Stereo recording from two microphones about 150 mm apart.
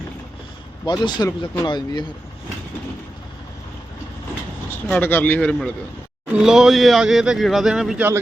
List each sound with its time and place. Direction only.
0.9 s speech: 30° left (ahead or behind)
4.7 s a man's voice: 10° left (ahead or behind)
6.3 s speech: 5° right (ahead or behind)